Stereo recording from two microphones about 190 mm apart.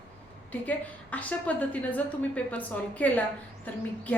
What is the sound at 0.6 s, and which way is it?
A woman's voice, 10° left (ahead or behind).